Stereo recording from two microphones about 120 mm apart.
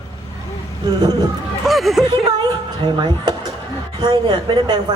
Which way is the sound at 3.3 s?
35° right (ahead or behind).